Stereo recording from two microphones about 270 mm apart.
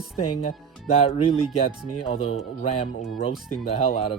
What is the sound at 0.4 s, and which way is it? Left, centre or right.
Speech, left.